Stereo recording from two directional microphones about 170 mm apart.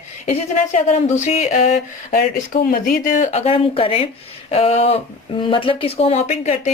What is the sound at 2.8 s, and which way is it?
Speech, 55° left (ahead or behind).